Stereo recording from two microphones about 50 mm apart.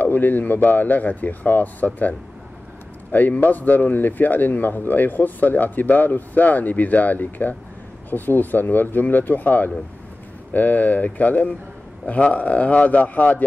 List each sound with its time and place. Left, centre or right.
0.0 s speech: left
3.1 s speech: left